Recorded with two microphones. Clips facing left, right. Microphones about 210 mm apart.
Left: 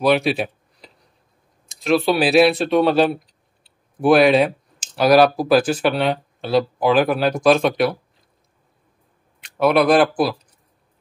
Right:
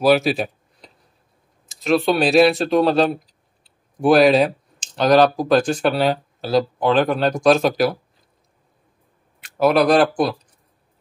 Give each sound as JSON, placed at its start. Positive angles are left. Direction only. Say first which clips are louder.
{"t": 0.0, "sound": "a sound", "louder": "right 1 dB", "side_deg": 0}
{"t": 1.7, "sound": "speech", "louder": "even", "side_deg": 0}
{"t": 9.4, "sound": "speech", "louder": "even", "side_deg": 0}